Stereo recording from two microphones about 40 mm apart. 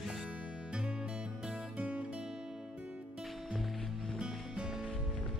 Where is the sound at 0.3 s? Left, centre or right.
Right.